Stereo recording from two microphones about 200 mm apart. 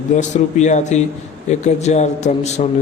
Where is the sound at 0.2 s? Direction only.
35° left (ahead or behind).